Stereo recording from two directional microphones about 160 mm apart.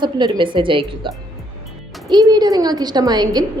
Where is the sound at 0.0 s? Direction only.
30° right (ahead or behind).